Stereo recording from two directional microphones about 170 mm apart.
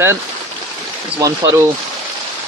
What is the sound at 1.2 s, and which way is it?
Speech, 20° right (ahead or behind).